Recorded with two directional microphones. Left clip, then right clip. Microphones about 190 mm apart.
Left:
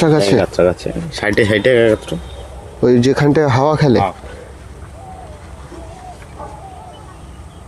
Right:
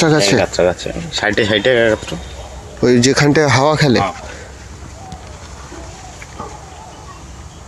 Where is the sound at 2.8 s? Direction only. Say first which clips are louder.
Even; 10° left (ahead or behind).